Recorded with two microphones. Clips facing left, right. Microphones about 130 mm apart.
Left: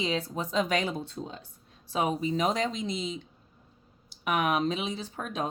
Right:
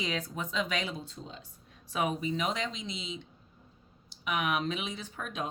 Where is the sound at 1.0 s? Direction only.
65° left (ahead or behind).